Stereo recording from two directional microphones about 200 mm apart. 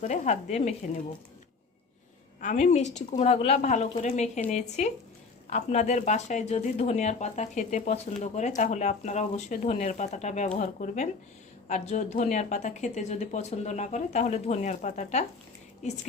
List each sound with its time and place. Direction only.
0.0 s speech: 35° left (ahead or behind)
2.4 s speech: 40° left (ahead or behind)